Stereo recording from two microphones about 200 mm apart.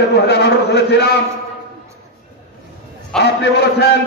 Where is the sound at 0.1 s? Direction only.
55° left (ahead or behind).